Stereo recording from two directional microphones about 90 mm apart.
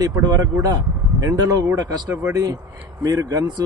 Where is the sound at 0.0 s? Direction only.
45° right (ahead or behind).